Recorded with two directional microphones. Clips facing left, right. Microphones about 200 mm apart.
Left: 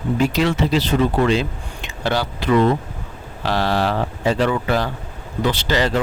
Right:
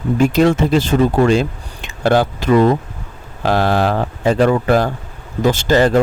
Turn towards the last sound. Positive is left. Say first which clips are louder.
# right 7 dB
turn(degrees=-50)  # may be behind; listen again after turning